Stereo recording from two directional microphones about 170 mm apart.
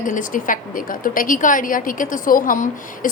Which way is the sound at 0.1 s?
50° left (ahead or behind).